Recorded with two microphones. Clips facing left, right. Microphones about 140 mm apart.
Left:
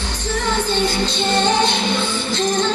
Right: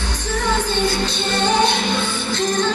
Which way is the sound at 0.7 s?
20° left (ahead or behind).